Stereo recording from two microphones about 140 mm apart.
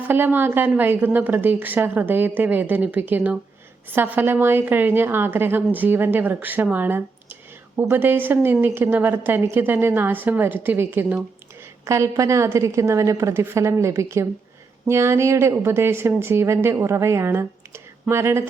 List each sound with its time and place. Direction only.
0.1 s a woman's voice: 15° right (ahead or behind)